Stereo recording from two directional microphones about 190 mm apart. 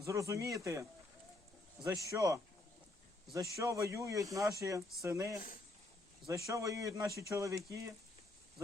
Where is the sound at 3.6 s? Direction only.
15° right (ahead or behind).